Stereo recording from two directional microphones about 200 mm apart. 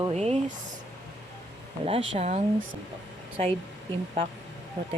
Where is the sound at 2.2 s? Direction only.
35° right (ahead or behind).